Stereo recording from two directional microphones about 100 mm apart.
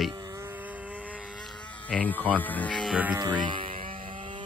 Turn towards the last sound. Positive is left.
turn(degrees=-50)  # may be behind; listen again after turning